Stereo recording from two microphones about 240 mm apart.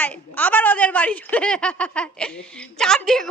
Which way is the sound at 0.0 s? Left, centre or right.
Centre.